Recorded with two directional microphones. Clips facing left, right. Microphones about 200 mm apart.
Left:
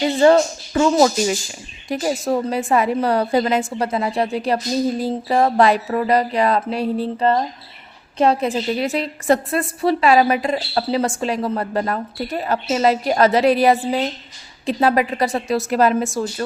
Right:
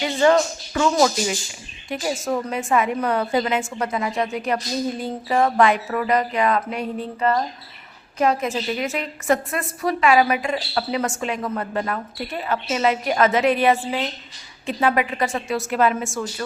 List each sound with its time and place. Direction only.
0.0 s a woman's voice: 35° left (ahead or behind)